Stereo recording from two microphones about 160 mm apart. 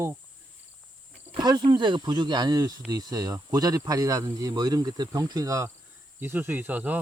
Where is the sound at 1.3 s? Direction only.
25° right (ahead or behind).